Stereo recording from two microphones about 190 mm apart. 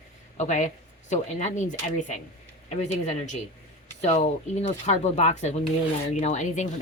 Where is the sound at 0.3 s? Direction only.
40° left (ahead or behind).